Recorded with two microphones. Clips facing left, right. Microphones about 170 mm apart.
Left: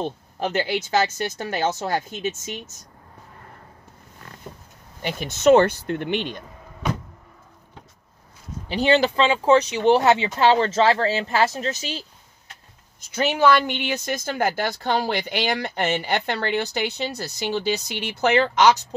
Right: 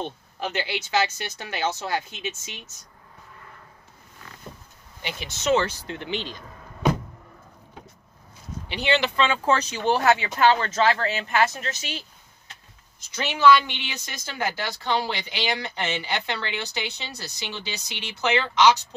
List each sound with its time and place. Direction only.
0.0 s speech: 45° left (ahead or behind)
5.0 s speech: 50° left (ahead or behind)
8.6 s speech: 40° left (ahead or behind)
13.1 s speech: 50° left (ahead or behind)